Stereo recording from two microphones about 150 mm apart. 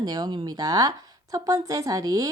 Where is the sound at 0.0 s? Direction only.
25° right (ahead or behind).